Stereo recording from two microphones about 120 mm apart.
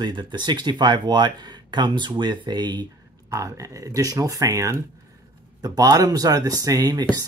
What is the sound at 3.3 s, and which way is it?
Speech, 25° right (ahead or behind).